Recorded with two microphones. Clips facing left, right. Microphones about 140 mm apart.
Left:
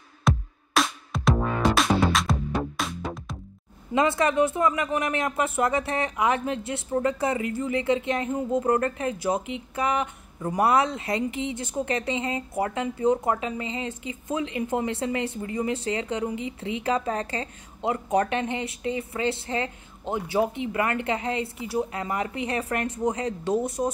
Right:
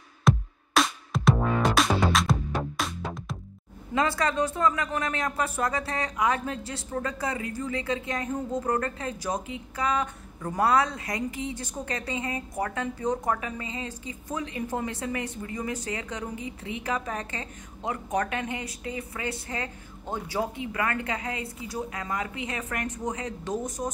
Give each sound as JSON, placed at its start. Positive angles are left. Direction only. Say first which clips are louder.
{"t": 0.3, "sound": "music", "louder": "right 1 dB", "side_deg": 0}
{"t": 3.9, "sound": "a woman's voice", "louder": "left 4 dB", "side_deg": 25}
{"t": 23.8, "sound": "a woman's voice", "louder": "left 6 dB", "side_deg": 20}